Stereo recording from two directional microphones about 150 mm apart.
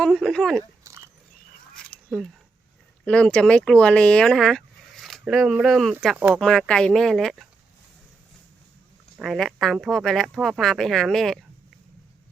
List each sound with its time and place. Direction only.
0.0 s speech: centre (ahead or behind)
0.9 s biting: 20° right (ahead or behind)
1.7 s a sound: centre (ahead or behind)
3.0 s speech: 5° left (ahead or behind); by 6.4 s 10° right (ahead or behind)
6.4 s speech: 5° left (ahead or behind)
9.1 s speech: centre (ahead or behind)